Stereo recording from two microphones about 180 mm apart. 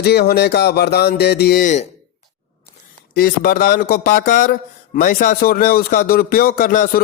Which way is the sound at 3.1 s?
55° left (ahead or behind).